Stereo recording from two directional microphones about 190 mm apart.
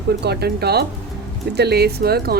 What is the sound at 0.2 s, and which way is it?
Speech, 60° right (ahead or behind).